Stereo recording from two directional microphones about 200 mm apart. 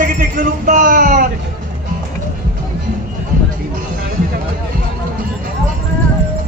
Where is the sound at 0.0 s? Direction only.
40° right (ahead or behind).